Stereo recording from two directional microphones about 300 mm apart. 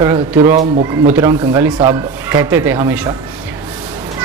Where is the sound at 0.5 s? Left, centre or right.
Right.